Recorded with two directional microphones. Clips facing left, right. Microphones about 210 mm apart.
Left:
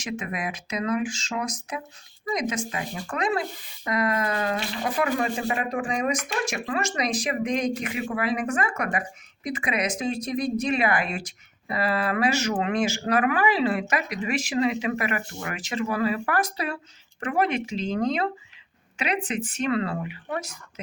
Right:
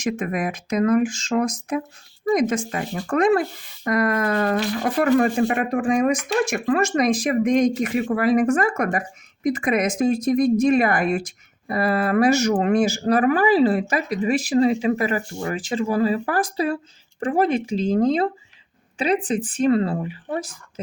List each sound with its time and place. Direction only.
0.0 s speech: 50° right (ahead or behind)